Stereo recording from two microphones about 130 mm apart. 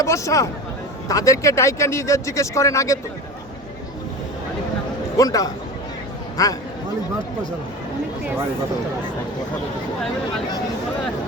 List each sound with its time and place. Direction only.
0.0 s speech: 25° left (ahead or behind)
5.1 s speech: 25° left (ahead or behind)